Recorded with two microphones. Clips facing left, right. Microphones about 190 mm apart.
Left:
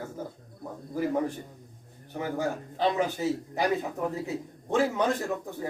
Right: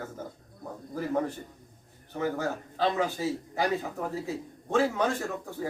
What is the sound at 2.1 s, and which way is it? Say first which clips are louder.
Speech: even; 15° left (ahead or behind).